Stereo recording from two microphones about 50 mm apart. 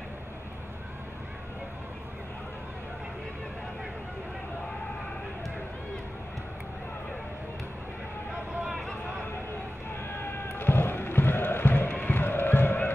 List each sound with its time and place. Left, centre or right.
10.0 s music: left